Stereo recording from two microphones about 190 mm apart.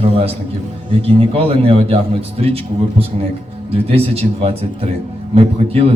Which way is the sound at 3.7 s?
30° right (ahead or behind).